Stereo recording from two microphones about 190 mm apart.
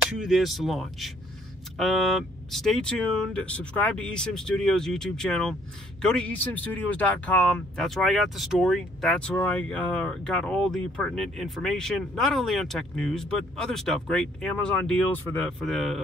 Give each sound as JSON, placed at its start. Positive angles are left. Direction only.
{"t": 0.2, "sound": "speech", "side_deg": 0}